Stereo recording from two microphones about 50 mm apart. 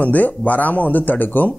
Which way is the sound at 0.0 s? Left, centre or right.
Left.